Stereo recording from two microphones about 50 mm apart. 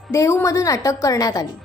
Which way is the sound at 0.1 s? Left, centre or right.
Left.